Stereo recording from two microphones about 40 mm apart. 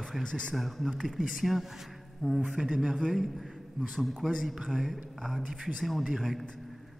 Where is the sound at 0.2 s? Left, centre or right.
Left.